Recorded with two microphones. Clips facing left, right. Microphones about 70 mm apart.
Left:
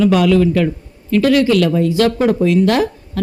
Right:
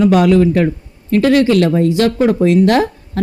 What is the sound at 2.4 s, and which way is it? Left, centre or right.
Speech, right.